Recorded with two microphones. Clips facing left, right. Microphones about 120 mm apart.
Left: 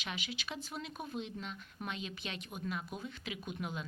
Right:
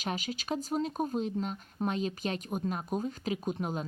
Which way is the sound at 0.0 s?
40° right (ahead or behind).